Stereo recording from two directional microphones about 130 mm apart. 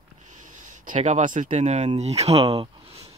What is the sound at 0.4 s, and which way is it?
Speech, 75° right (ahead or behind).